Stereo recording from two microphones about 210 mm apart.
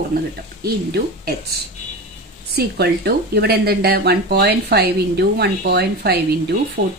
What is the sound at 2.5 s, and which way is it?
Speech, 50° right (ahead or behind).